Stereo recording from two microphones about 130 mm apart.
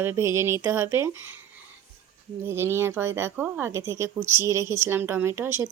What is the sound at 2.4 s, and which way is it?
Speech, 20° right (ahead or behind).